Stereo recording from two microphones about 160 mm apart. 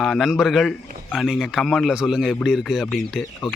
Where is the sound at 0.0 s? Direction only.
Centre (ahead or behind).